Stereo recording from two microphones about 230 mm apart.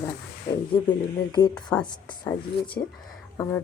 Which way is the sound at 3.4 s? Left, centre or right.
Centre.